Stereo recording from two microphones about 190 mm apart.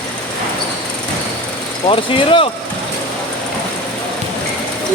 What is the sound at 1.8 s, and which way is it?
Speech, 25° left (ahead or behind).